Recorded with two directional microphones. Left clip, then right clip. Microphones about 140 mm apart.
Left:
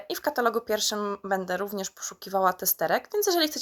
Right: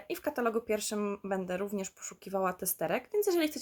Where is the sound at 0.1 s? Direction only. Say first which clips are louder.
Left 6 dB; 15° right (ahead or behind).